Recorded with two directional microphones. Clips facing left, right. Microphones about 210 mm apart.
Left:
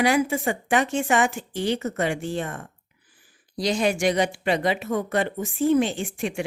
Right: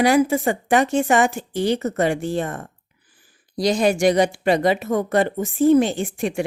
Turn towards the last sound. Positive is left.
turn(degrees=-40)  # may be behind; listen again after turning